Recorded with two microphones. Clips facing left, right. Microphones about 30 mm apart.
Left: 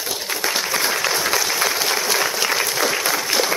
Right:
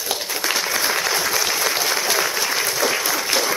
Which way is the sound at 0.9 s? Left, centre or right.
Centre.